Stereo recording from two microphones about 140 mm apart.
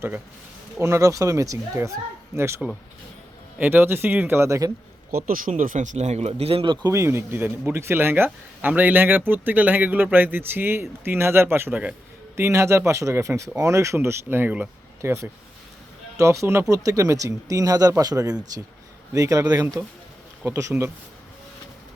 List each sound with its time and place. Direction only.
0.8 s speech: 20° right (ahead or behind)
5.1 s speech: 85° right; by 6.7 s 40° right (ahead or behind)
6.8 s speech: 20° right (ahead or behind)